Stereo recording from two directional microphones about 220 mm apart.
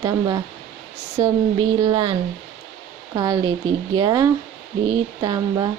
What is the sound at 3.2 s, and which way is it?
Speech, 20° right (ahead or behind).